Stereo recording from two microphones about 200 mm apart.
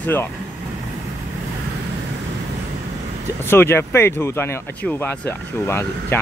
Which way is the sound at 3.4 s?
10° left (ahead or behind).